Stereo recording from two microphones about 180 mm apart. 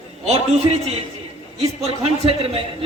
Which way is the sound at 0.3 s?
35° right (ahead or behind).